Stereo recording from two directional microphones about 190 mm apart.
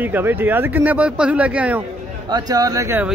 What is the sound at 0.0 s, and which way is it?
Speech, 10° right (ahead or behind).